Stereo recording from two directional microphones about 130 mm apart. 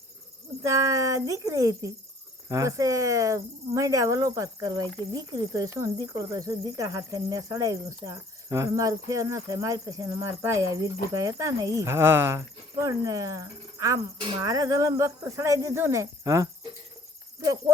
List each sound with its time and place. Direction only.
0.6 s speech: 25° right (ahead or behind)